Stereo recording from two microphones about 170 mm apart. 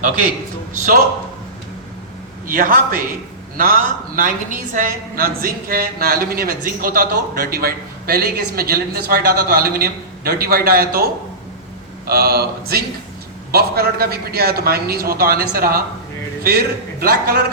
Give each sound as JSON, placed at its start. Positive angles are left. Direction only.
{"t": 2.5, "sound": "a woman's voice", "side_deg": -55}